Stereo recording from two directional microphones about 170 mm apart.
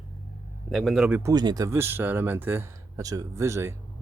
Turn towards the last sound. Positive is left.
turn(degrees=-15)  # may be behind; listen again after turning